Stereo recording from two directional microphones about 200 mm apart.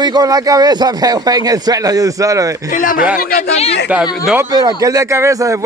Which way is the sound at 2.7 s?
40° left (ahead or behind).